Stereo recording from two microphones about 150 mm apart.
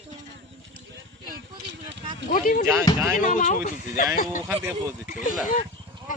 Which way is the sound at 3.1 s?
60° left (ahead or behind).